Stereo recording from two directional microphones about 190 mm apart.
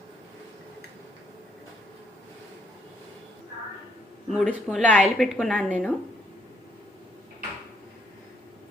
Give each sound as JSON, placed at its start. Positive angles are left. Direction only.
{"t": 4.3, "sound": "a woman's voice", "side_deg": 0}